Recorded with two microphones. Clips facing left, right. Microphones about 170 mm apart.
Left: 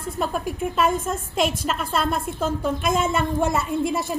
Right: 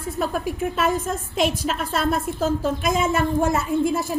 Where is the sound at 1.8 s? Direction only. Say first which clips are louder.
Right 1 dB; 50° right (ahead or behind).